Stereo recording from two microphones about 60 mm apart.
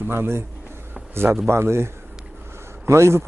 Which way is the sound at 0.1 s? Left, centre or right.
Right.